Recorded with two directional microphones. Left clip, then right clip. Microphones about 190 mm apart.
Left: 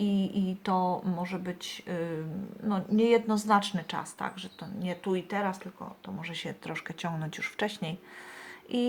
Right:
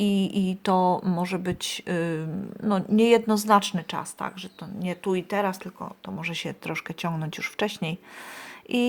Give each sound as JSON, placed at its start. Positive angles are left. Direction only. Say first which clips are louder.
{"t": 0.0, "sound": "speech", "louder": "right 5 dB", "side_deg": -40}